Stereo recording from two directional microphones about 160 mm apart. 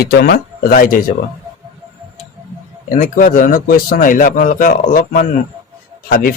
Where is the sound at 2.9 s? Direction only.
60° left (ahead or behind).